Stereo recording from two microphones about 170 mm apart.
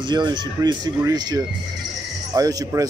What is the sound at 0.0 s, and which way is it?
Speech, 25° right (ahead or behind).